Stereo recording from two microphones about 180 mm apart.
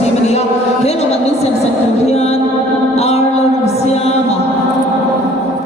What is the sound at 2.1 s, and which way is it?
Music, 35° left (ahead or behind).